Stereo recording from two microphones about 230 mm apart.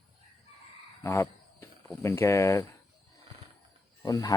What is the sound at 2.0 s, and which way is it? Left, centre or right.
Speech, centre.